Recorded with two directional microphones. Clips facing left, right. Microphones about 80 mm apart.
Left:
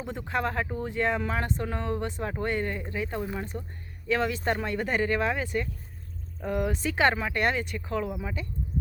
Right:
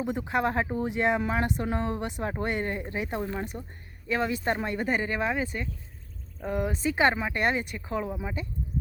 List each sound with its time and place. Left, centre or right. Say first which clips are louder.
0.0 s speech: right 3 dB; centre
0.5 s speech: right 2 dB; right